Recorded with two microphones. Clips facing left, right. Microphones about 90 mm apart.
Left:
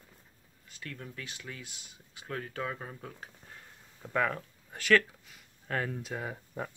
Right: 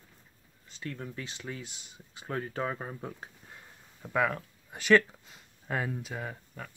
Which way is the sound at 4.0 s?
5° right (ahead or behind).